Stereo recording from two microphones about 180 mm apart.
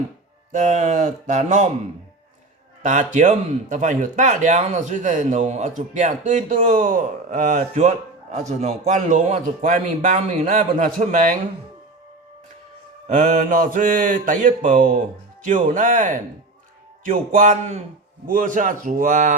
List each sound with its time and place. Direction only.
0.5 s speech: 40° right (ahead or behind)
2.8 s speech: 45° right (ahead or behind)
13.1 s speech: 50° right (ahead or behind)